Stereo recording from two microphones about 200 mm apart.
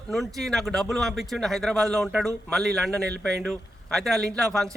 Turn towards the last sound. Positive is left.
turn(degrees=0)  # may be behind; listen again after turning